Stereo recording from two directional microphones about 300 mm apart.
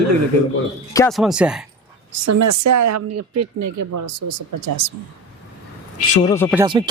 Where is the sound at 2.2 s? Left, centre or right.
Right.